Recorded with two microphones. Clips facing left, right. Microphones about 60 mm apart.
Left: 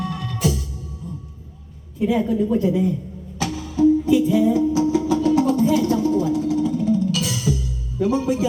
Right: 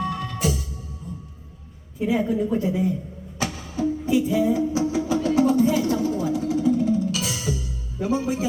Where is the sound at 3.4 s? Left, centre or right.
Right.